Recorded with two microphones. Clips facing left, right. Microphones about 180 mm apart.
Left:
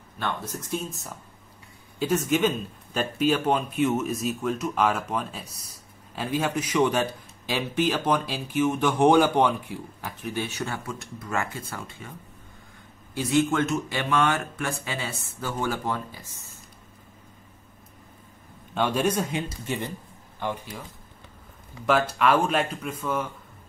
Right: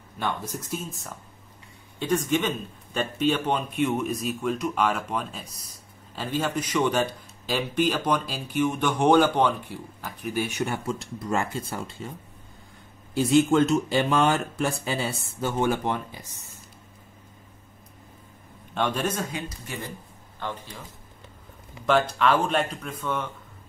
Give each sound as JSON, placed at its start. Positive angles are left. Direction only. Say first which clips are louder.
{"t": 0.2, "sound": "a man's voice", "louder": "right 1 dB", "side_deg": -10}
{"t": 2.3, "sound": "a man's voice", "louder": "left 2 dB", "side_deg": 5}
{"t": 10.3, "sound": "speech", "louder": "right 4 dB", "side_deg": -15}
{"t": 10.9, "sound": "speech", "louder": "right 5 dB", "side_deg": -30}
{"t": 13.5, "sound": "speech", "louder": "right 5 dB", "side_deg": -30}
{"t": 18.8, "sound": "speech", "louder": "left 3 dB", "side_deg": 10}
{"t": 20.3, "sound": "speech", "louder": "left 3 dB", "side_deg": 10}
{"t": 21.8, "sound": "a man's voice", "louder": "even", "side_deg": 5}